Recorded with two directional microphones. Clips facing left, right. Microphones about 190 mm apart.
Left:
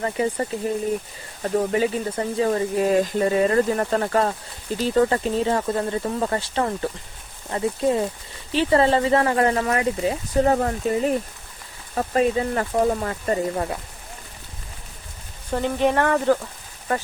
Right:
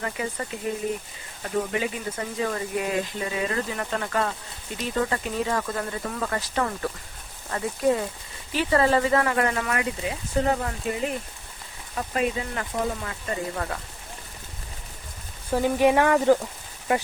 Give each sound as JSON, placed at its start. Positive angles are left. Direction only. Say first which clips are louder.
{"t": 0.0, "sound": "speech", "louder": "left 7 dB", "side_deg": 30}
{"t": 15.5, "sound": "speech", "louder": "right 1 dB", "side_deg": -10}